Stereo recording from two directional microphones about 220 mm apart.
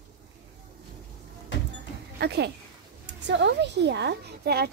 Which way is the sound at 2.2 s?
50° right (ahead or behind).